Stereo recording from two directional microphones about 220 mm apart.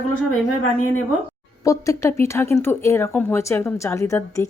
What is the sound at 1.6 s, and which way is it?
Speech, 15° left (ahead or behind).